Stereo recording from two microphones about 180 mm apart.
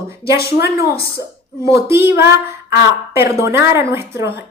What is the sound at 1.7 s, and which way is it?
A woman's voice, 15° right (ahead or behind).